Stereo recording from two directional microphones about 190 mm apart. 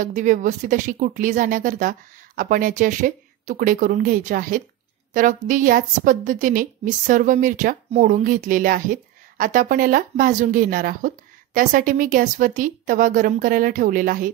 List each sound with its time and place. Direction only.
0.0 s a woman's voice: 45° right (ahead or behind)